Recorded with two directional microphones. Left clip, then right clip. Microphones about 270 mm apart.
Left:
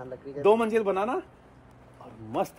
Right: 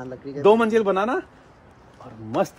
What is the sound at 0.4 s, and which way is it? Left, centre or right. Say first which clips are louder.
Speech: right 5 dB; centre.